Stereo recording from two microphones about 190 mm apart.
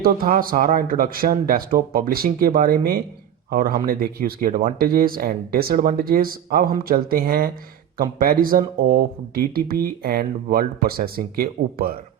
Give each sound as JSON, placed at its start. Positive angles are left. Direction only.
{"t": 0.0, "sound": "speech", "side_deg": -50}